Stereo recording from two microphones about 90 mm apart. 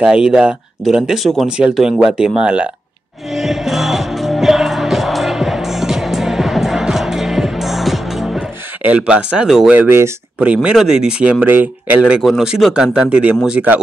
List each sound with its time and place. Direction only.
0.0 s speech: 10° right (ahead or behind)
3.3 s music: centre (ahead or behind)
8.8 s speech: 10° right (ahead or behind)
9.8 s speech: 25° right (ahead or behind)
10.5 s speech: 10° right (ahead or behind)
12.2 s speech: 5° right (ahead or behind)